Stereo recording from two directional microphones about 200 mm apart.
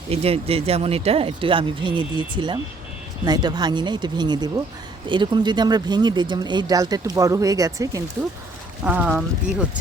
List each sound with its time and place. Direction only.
0.1 s speech: 30° right (ahead or behind)
8.8 s speech: 5° right (ahead or behind)